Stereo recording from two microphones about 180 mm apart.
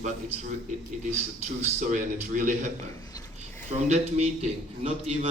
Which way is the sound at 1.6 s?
45° right (ahead or behind).